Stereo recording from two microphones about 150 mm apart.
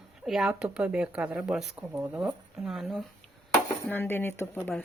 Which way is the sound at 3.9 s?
15° left (ahead or behind).